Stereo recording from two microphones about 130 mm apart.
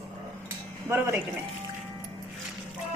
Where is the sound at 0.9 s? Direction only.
20° right (ahead or behind).